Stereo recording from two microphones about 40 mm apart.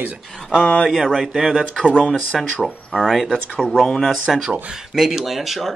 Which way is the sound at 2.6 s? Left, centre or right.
Centre.